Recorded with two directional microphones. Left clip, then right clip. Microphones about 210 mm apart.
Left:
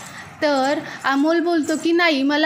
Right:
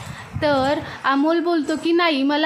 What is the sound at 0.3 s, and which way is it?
A woman's voice, centre (ahead or behind).